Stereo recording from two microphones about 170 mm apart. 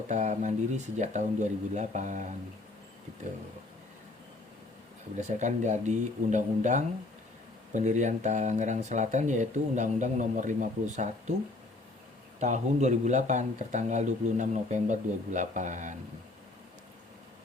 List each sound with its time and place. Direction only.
0.1 s speech: 45° right (ahead or behind)
5.4 s speech: 45° right (ahead or behind)
12.4 s speech: 45° right (ahead or behind)